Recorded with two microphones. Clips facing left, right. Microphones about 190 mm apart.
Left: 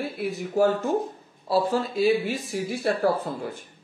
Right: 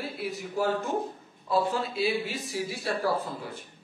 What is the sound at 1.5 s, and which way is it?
Speech, 35° left (ahead or behind).